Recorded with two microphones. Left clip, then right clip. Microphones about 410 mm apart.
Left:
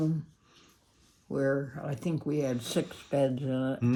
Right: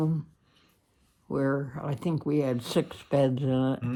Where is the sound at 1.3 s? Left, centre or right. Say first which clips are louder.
Right 1 dB; centre.